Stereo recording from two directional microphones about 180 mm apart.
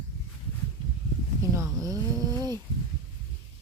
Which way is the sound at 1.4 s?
15° right (ahead or behind).